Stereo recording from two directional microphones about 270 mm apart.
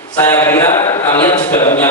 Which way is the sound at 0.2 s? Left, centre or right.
Centre.